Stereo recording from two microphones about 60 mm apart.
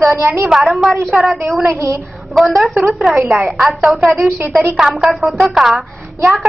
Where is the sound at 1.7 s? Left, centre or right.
Right.